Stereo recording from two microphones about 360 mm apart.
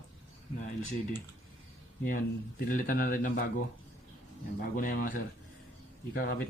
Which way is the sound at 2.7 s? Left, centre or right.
Left.